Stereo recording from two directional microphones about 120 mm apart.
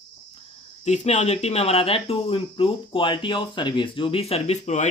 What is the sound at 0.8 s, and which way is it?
Speech, 70° left (ahead or behind).